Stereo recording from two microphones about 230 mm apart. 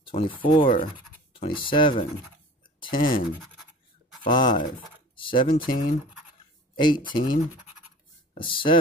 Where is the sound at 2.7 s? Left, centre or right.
Left.